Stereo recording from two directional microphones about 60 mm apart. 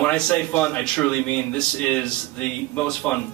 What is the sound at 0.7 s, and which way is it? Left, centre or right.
Speech, left.